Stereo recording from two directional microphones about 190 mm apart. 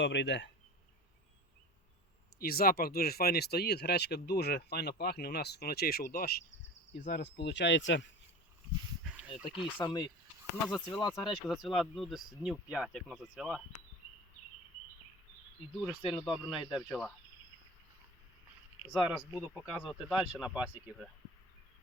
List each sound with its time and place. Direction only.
0.0 s speech: 70° left (ahead or behind)
2.4 s speech: 50° left (ahead or behind); by 8.0 s 70° left (ahead or behind)
9.3 s speech: 30° left (ahead or behind)
10.7 s speech: centre (ahead or behind)
16.1 s speech: centre (ahead or behind)
19.1 s speech: 5° right (ahead or behind)